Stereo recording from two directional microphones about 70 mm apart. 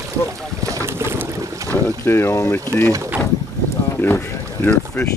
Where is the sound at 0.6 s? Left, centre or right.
Right.